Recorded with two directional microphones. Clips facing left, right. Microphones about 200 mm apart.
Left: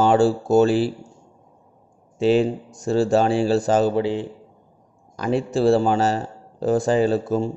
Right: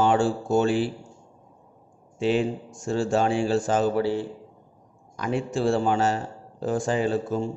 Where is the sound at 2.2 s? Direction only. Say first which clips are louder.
Left 5 dB; 35° left (ahead or behind).